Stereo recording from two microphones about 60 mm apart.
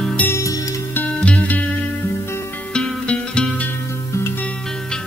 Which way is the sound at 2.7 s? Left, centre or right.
Centre.